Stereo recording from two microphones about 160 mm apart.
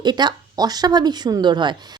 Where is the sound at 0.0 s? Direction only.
25° right (ahead or behind).